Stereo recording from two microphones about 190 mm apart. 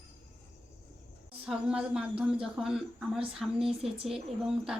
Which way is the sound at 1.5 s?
5° right (ahead or behind).